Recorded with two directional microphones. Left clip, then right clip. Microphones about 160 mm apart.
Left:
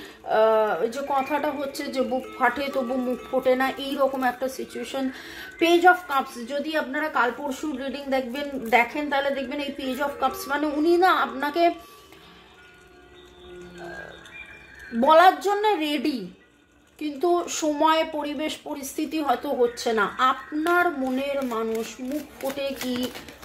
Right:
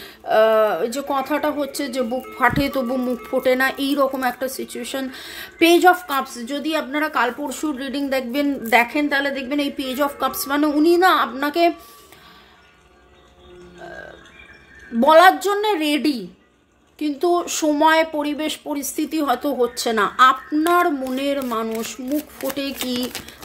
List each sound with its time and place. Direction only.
0.3 s speech: 55° right (ahead or behind)
15.0 s speech: 45° right (ahead or behind)